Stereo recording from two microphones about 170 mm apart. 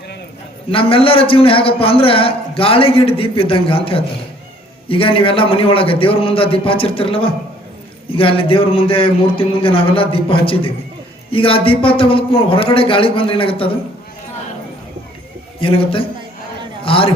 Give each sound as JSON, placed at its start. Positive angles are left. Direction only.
{"t": 0.7, "sound": "a man's voice", "side_deg": 30}
{"t": 15.6, "sound": "a man's voice", "side_deg": 30}